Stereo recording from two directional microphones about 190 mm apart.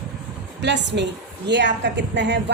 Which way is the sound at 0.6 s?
65° right (ahead or behind).